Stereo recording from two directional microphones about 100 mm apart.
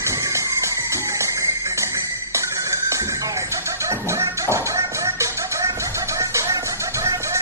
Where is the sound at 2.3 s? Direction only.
30° right (ahead or behind).